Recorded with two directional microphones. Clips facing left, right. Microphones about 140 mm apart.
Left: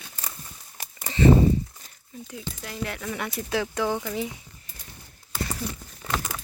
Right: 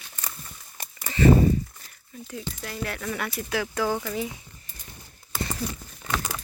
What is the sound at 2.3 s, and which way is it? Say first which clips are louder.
Speech: right 2 dB; 15° left (ahead or behind).